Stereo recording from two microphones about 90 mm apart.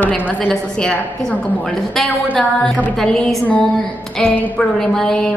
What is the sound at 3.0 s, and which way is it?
A woman's voice, 5° left (ahead or behind).